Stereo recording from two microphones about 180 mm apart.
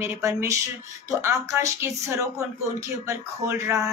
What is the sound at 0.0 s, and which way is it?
Speech, 15° right (ahead or behind).